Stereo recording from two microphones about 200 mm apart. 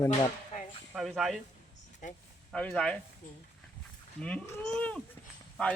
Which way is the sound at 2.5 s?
5° left (ahead or behind).